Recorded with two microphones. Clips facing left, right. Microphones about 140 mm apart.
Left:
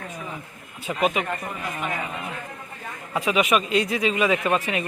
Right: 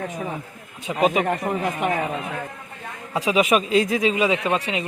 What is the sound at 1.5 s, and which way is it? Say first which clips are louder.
Speech: right 9 dB; 50° right (ahead or behind).